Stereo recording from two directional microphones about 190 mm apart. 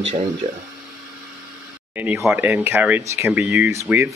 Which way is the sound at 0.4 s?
30° right (ahead or behind).